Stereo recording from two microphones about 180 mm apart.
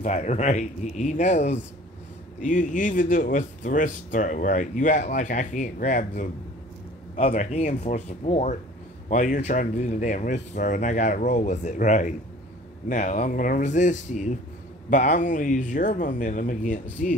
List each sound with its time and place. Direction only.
0.0 s speech: 40° left (ahead or behind)